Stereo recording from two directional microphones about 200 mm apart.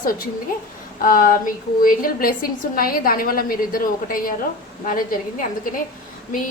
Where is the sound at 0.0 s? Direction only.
45° left (ahead or behind).